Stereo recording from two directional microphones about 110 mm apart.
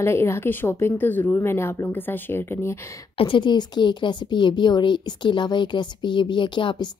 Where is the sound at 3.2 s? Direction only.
50° left (ahead or behind).